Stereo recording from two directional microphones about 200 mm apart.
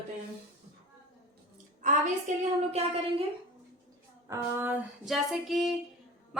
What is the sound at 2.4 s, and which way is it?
Speech, 30° right (ahead or behind).